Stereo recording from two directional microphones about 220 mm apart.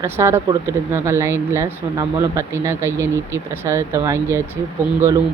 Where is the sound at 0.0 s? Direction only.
10° right (ahead or behind).